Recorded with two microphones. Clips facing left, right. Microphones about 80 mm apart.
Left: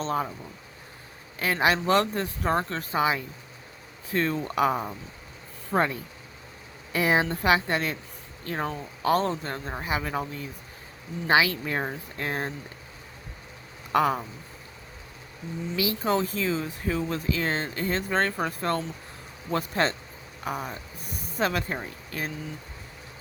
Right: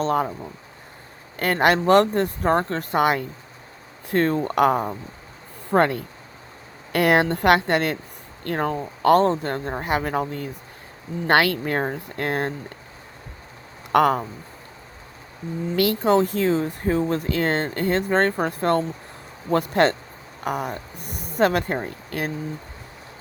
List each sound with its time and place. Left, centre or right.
0.0 s speech: right
1.4 s speech: right
2.9 s a woman's voice: right
4.1 s speech: right
4.5 s speech: right
5.7 s a woman's voice: right
8.4 s speech: right
11.3 s speech: right
13.9 s speech: right
15.7 s speech: right